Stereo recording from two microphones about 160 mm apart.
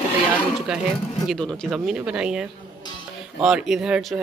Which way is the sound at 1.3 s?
5° left (ahead or behind).